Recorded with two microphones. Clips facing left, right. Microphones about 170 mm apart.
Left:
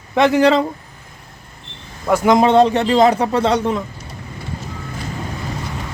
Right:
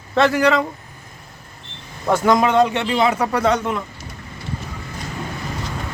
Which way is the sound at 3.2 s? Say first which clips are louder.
Left 2 dB; 30° left (ahead or behind).